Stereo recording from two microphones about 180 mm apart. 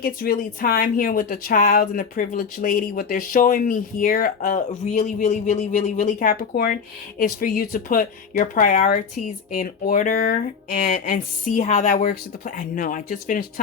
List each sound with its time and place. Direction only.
0.0 s a woman's voice: 55° left (ahead or behind)